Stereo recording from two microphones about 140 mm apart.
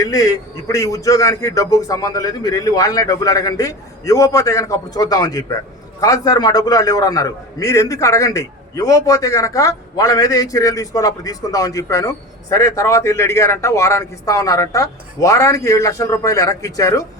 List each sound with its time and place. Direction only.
0.0 s a man's voice: 25° left (ahead or behind)